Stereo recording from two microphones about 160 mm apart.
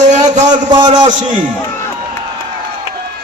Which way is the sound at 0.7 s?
25° right (ahead or behind).